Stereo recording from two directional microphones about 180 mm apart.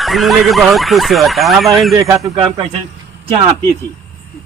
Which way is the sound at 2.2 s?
30° right (ahead or behind).